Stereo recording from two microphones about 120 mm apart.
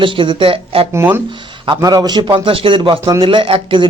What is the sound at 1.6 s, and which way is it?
Speech, 35° right (ahead or behind).